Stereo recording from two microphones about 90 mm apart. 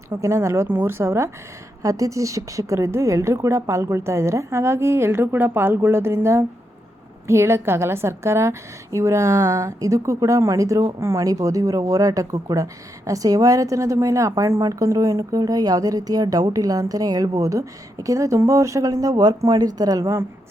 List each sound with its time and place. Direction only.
0.1 s a woman's voice: 30° right (ahead or behind)